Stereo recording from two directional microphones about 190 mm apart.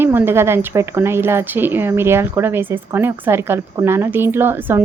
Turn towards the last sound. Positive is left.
turn(degrees=-10)  # may be behind; listen again after turning